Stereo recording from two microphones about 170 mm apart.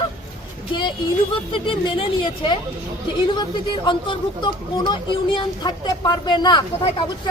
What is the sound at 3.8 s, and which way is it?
Speech, 25° left (ahead or behind).